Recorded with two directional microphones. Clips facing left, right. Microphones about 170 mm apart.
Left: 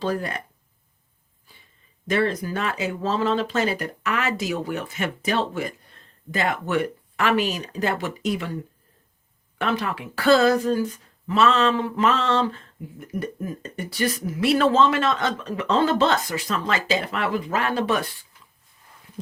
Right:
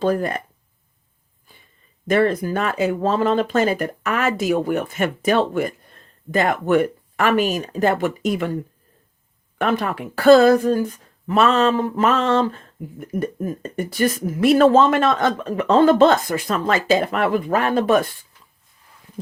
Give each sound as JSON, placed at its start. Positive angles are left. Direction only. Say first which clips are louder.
{"t": 0.0, "sound": "speech", "louder": "right 6 dB", "side_deg": -50}
{"t": 1.5, "sound": "a sound", "louder": "right 3 dB", "side_deg": -50}
{"t": 2.0, "sound": "speech", "louder": "right 5 dB", "side_deg": -55}
{"t": 9.6, "sound": "speech", "louder": "right 4 dB", "side_deg": -50}